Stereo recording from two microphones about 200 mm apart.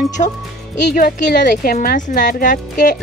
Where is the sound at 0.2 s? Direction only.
35° left (ahead or behind).